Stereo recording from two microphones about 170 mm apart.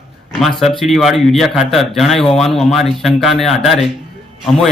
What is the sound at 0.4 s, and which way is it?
Speech, centre (ahead or behind).